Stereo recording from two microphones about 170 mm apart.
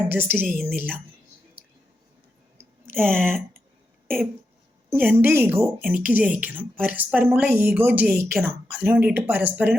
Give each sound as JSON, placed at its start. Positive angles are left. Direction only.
{"t": 0.1, "sound": "a woman's voice", "side_deg": -10}
{"t": 0.4, "sound": "speech", "side_deg": 5}
{"t": 2.9, "sound": "a woman's voice", "side_deg": -10}
{"t": 4.9, "sound": "a woman's voice", "side_deg": -15}